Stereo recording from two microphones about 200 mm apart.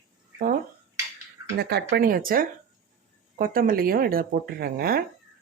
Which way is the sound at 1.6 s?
55° right (ahead or behind).